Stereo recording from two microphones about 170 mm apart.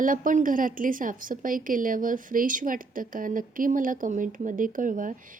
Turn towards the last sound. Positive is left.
turn(degrees=-50)  # may be behind; listen again after turning